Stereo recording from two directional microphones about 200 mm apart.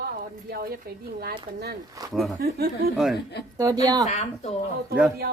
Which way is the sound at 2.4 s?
50° right (ahead or behind).